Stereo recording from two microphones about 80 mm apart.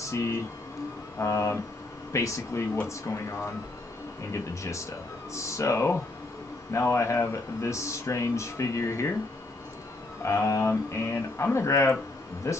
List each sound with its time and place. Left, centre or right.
0.0 s speech: left
10.2 s speech: left